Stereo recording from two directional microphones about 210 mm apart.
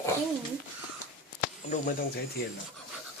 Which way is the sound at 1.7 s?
40° left (ahead or behind).